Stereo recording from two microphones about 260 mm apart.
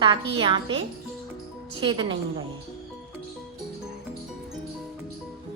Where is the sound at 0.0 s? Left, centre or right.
Centre.